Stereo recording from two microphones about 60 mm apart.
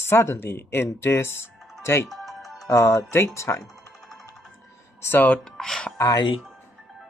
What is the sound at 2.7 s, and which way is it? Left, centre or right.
Speech, left.